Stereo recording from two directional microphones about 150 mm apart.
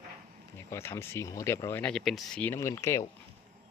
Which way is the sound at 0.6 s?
15° left (ahead or behind).